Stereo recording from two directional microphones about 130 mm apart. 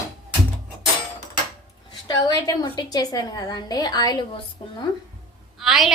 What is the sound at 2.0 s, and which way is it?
A woman's voice, 30° left (ahead or behind).